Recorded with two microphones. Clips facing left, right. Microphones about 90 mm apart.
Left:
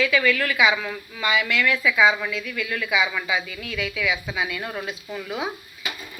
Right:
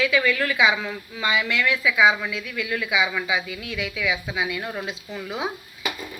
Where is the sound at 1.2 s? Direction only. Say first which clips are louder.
Left 1 dB; 20° right (ahead or behind).